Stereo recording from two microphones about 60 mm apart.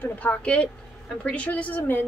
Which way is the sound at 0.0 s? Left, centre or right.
Left.